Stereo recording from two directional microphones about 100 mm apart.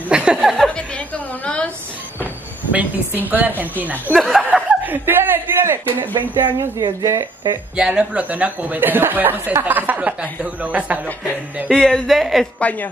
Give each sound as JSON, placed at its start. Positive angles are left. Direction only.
{"t": 0.1, "sound": "a sound", "side_deg": -10}
{"t": 0.7, "sound": "a sound", "side_deg": 10}
{"t": 2.7, "sound": "speech", "side_deg": -15}
{"t": 4.1, "sound": "speech", "side_deg": 0}
{"t": 4.8, "sound": "speech", "side_deg": -20}
{"t": 6.8, "sound": "speech", "side_deg": -40}
{"t": 7.7, "sound": "speech", "side_deg": -10}
{"t": 11.7, "sound": "speech", "side_deg": 5}
{"t": 12.5, "sound": "a woman's voice", "side_deg": 15}